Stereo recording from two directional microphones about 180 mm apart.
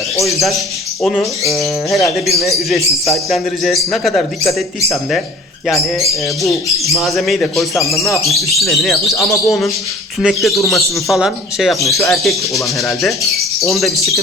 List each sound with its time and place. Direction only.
1.0 s a man's voice: centre (ahead or behind)
6.9 s a man's voice: centre (ahead or behind)
7.9 s speech: 15° left (ahead or behind)
8.2 s a man's voice: centre (ahead or behind)